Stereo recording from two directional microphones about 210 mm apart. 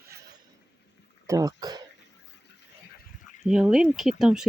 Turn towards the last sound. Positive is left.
turn(degrees=0)  # may be behind; listen again after turning